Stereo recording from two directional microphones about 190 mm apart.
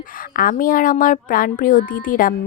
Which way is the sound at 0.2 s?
50° left (ahead or behind).